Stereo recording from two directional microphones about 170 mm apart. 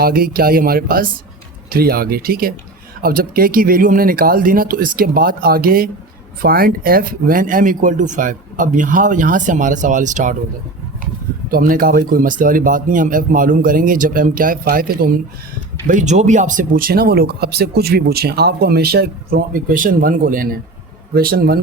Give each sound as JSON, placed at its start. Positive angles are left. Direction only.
{"t": 0.0, "sound": "speech", "side_deg": -60}
{"t": 11.5, "sound": "speech", "side_deg": -55}
{"t": 15.9, "sound": "speech", "side_deg": -45}